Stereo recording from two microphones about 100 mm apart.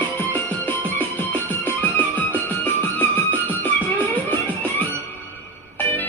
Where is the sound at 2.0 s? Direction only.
20° left (ahead or behind).